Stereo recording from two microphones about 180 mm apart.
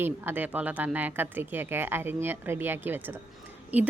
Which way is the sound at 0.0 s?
10° right (ahead or behind).